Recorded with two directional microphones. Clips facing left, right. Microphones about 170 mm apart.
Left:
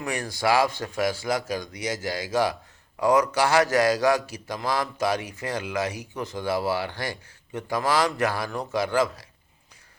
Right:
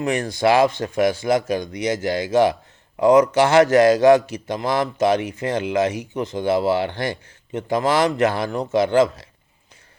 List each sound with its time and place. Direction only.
0.0 s a man's voice: 20° right (ahead or behind)